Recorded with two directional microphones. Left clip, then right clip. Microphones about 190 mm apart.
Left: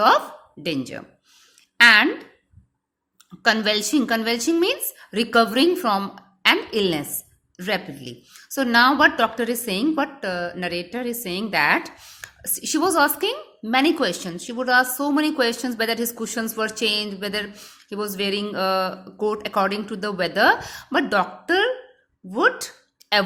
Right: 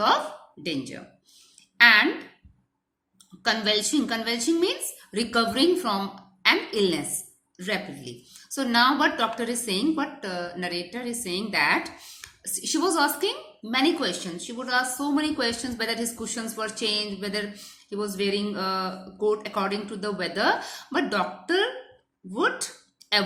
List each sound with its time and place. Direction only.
0.6 s a woman's voice: 50° left (ahead or behind)
3.4 s a woman's voice: 50° left (ahead or behind)